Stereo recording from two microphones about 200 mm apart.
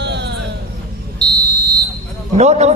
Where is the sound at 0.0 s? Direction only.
60° right (ahead or behind).